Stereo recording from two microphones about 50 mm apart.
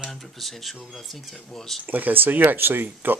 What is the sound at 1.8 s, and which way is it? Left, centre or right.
Speech, right.